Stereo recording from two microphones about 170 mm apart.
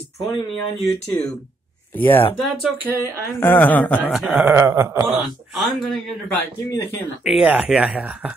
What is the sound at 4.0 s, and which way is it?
Speech, 5° right (ahead or behind).